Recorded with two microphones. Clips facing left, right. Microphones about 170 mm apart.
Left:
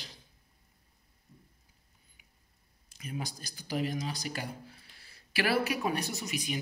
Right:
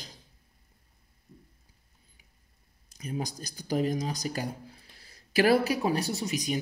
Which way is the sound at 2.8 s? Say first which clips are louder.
Right 5 dB; 40° right (ahead or behind).